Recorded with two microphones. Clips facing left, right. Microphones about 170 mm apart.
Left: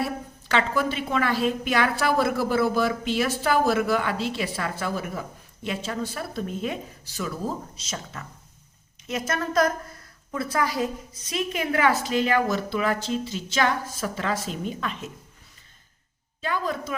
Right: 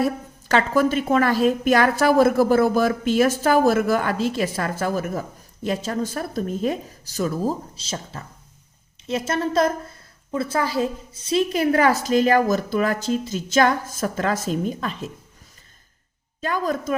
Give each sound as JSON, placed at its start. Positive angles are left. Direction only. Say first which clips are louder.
{"t": 0.0, "sound": "a woman's voice", "louder": "right 6 dB", "side_deg": -45}
{"t": 16.4, "sound": "a woman's voice", "louder": "right 4 dB", "side_deg": -45}